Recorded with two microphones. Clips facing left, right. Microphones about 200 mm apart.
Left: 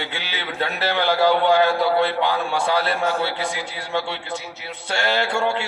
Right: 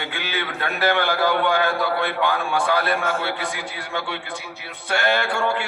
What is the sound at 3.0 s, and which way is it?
Speech, 35° left (ahead or behind).